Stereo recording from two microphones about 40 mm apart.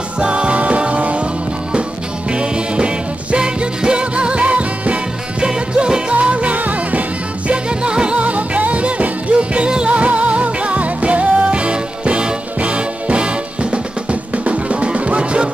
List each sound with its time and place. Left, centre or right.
0.2 s music: right
2.3 s music: right
6.1 s music: right
7.8 s music: right